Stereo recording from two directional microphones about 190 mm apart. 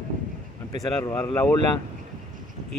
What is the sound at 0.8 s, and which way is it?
Speech, 20° left (ahead or behind).